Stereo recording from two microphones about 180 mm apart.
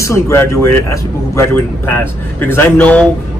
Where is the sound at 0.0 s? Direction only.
15° left (ahead or behind).